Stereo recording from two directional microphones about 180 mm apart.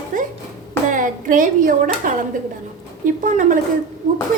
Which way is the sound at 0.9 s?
45° right (ahead or behind).